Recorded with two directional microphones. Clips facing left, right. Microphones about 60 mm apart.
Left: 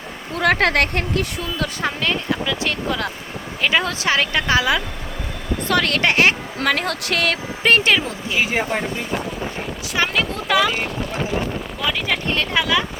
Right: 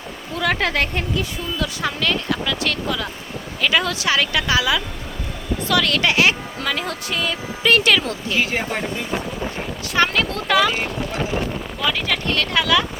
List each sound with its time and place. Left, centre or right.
0.3 s a woman's voice: left
2.0 s a woman's voice: left
7.6 s a woman's voice: left
8.0 s speech: centre